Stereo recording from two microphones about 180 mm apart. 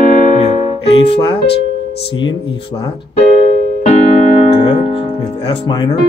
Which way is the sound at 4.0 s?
35° left (ahead or behind).